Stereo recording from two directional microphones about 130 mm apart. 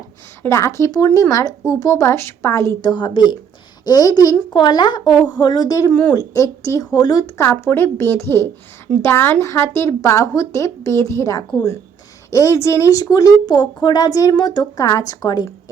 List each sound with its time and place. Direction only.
0.4 s speech: 20° left (ahead or behind)
2.8 s a woman's voice: 35° left (ahead or behind)
5.9 s speech: 10° left (ahead or behind)
6.1 s speech: 25° left (ahead or behind)